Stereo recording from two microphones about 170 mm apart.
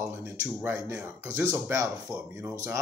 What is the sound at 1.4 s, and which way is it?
Speech, 20° right (ahead or behind).